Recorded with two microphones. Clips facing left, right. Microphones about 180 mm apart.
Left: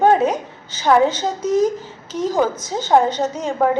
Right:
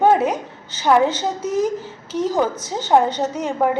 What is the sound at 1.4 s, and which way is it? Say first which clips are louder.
Speech: left 6 dB; 15° left (ahead or behind).